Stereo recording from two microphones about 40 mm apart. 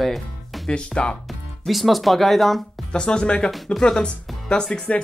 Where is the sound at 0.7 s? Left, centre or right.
Left.